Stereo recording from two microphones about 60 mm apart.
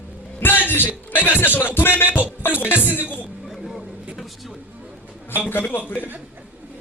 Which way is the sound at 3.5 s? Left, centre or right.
Centre.